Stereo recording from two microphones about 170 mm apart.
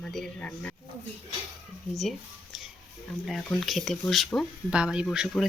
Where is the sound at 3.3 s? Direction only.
Centre (ahead or behind).